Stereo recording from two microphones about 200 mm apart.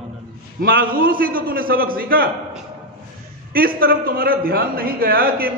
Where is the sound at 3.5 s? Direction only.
45° right (ahead or behind).